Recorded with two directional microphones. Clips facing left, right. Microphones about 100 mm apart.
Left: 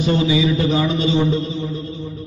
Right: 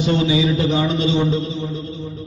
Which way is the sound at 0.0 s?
30° right (ahead or behind).